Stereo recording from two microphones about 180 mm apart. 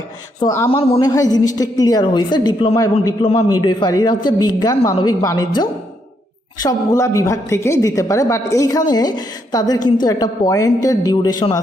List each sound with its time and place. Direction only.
0.4 s a woman's voice: 15° left (ahead or behind)